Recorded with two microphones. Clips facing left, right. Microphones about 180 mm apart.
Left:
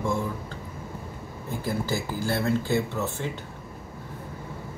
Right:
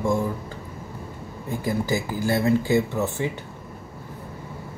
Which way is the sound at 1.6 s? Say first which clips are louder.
Right 4 dB; 15° right (ahead or behind).